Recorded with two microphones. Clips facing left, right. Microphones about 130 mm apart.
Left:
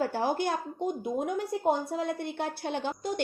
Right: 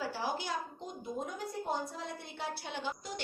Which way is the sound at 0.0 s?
55° left (ahead or behind).